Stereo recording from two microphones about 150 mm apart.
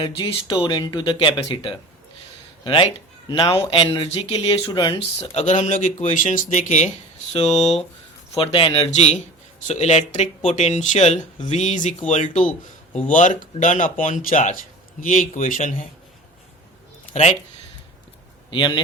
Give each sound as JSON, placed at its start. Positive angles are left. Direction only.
{"t": 0.0, "sound": "speech", "side_deg": 30}
{"t": 3.2, "sound": "speech", "side_deg": 30}
{"t": 5.3, "sound": "speech", "side_deg": 50}
{"t": 8.9, "sound": "speech", "side_deg": 50}
{"t": 18.5, "sound": "speech", "side_deg": 30}